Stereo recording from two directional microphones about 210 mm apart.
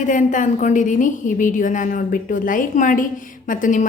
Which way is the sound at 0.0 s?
35° left (ahead or behind).